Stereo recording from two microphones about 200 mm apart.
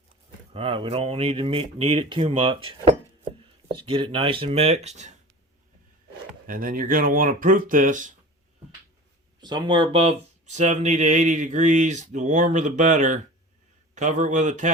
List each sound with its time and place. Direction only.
0.5 s speech: 25° right (ahead or behind)
6.5 s speech: 45° right (ahead or behind)
9.4 s speech: 20° right (ahead or behind); by 14.7 s 35° right (ahead or behind)